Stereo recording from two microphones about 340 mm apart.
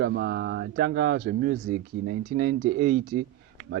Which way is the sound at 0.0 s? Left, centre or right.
Right.